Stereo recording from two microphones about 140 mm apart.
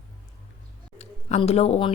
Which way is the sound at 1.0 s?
50° left (ahead or behind).